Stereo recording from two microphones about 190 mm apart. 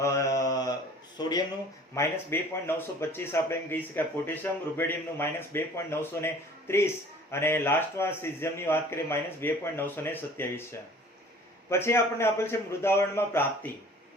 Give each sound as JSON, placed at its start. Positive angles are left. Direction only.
{"t": 0.0, "sound": "mantra", "side_deg": 15}
{"t": 1.2, "sound": "a sound", "side_deg": 20}
{"t": 2.0, "sound": "a man's voice", "side_deg": 10}